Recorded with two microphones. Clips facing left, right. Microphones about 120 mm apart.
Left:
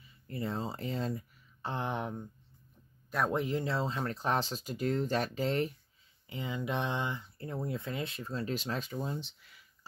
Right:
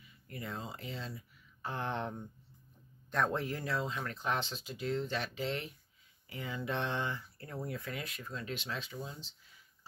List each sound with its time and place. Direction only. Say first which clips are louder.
0.3 s speech: left 6 dB; 30° left (ahead or behind)
1.6 s speech: left 2 dB; 20° left (ahead or behind)
3.3 s speech: left 4 dB; 15° left (ahead or behind); by 5.7 s 40° left (ahead or behind)
6.2 s speech: left 3 dB; 20° left (ahead or behind); by 9.6 s 65° left (ahead or behind)